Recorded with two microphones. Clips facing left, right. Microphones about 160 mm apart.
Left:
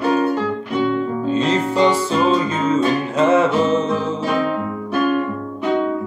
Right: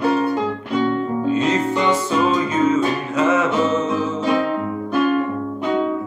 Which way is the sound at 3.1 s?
30° left (ahead or behind).